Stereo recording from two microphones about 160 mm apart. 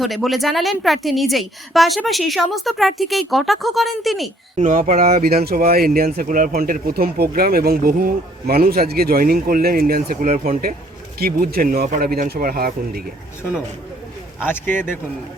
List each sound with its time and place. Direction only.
0.0 s speech: centre (ahead or behind)
4.5 s speech: 55° right (ahead or behind)
14.4 s speech: 15° left (ahead or behind)